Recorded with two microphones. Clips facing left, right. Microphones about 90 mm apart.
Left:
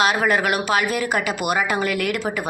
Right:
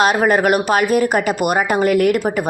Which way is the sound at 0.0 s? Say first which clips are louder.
Right 5 dB; 40° right (ahead or behind).